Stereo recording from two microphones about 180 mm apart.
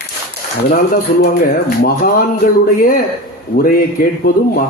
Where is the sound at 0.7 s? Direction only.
50° left (ahead or behind).